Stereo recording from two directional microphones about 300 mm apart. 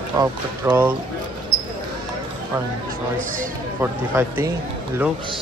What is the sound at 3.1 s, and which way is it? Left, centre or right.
Speech, right.